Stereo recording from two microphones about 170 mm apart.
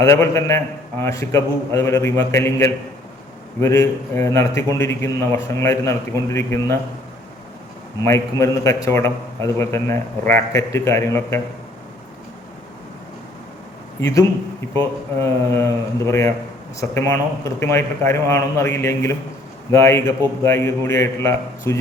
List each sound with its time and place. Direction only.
0.0 s a man's voice: 15° left (ahead or behind)
8.0 s a man's voice: 15° left (ahead or behind)
14.0 s a man's voice: 20° left (ahead or behind)